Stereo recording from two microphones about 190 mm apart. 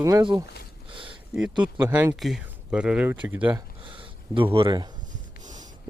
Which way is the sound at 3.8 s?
25° right (ahead or behind).